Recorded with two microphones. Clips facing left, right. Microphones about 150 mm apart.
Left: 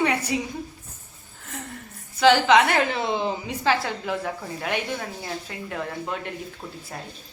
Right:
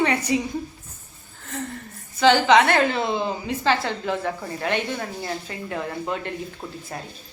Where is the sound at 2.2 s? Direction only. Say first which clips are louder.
Right 1 dB; 5° left (ahead or behind).